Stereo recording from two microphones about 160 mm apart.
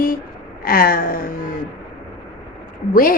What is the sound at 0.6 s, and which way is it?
Speech, 65° left (ahead or behind).